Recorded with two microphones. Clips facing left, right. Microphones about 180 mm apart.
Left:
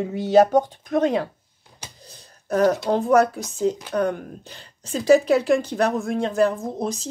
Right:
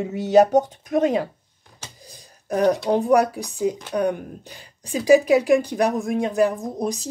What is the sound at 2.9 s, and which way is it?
Speech, 15° right (ahead or behind).